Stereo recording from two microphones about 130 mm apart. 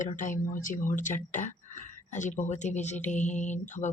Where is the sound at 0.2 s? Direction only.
85° left.